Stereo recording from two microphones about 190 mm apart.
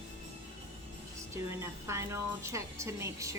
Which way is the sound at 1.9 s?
15° right (ahead or behind).